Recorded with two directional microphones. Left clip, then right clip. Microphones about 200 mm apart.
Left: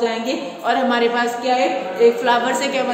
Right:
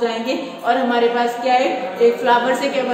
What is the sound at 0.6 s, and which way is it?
A woman's voice, 40° left (ahead or behind).